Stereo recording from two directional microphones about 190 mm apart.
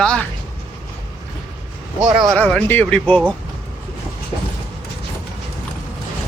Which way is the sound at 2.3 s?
5° left (ahead or behind).